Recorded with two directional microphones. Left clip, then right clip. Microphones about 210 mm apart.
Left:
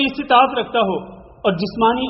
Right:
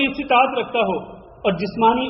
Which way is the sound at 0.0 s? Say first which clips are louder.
Left 3 dB; 30° left (ahead or behind).